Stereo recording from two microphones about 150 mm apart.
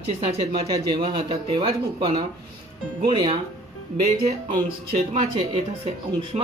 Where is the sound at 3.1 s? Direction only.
30° right (ahead or behind).